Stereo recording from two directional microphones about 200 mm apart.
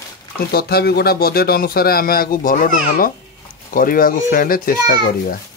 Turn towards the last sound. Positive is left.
turn(degrees=45)  # may be behind; listen again after turning